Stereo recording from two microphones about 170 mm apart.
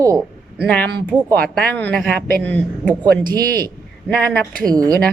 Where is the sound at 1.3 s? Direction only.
10° left (ahead or behind).